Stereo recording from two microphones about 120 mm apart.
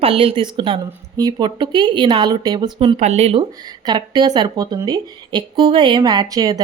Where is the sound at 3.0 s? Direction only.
65° right (ahead or behind).